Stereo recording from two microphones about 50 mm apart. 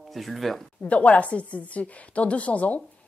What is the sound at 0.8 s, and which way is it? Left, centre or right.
Speech, left.